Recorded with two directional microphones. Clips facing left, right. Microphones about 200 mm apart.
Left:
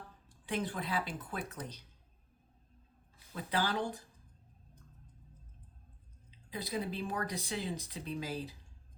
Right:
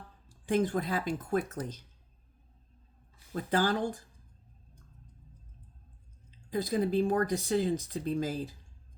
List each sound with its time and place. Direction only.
0.4 s speech: 45° right (ahead or behind)
3.3 s speech: 45° right (ahead or behind)
6.5 s speech: 45° right (ahead or behind)